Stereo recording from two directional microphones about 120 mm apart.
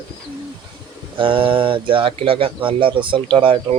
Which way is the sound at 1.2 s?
45° right (ahead or behind).